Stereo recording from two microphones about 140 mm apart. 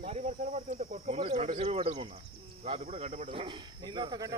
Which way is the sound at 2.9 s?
50° right (ahead or behind).